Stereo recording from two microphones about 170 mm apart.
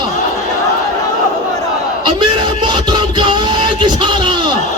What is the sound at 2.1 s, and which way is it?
Music, 25° right (ahead or behind).